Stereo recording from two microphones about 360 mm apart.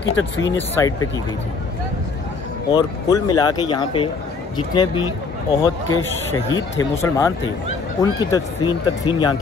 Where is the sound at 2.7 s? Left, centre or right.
Centre.